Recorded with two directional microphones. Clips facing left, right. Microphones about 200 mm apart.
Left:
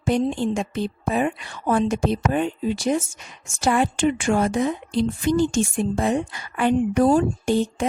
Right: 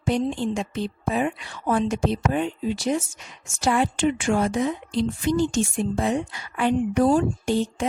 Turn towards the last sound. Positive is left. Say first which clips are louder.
# left 2 dB
turn(degrees=50)  # may be behind; listen again after turning